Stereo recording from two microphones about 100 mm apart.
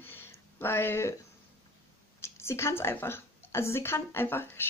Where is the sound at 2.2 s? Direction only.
25° left (ahead or behind).